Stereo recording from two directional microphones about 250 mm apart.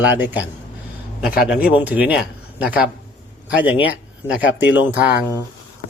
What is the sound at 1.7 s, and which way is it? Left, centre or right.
A man's voice, centre.